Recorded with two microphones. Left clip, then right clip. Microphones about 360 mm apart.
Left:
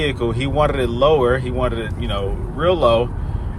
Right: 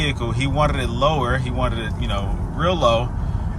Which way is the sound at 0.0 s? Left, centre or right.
Centre.